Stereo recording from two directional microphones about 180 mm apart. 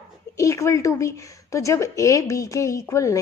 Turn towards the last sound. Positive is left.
turn(degrees=15)  # may be behind; listen again after turning